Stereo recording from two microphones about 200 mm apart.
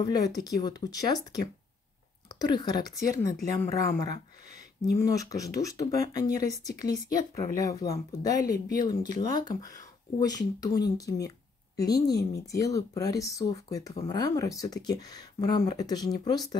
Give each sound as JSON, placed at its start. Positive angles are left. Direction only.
{"t": 0.0, "sound": "speech", "side_deg": 20}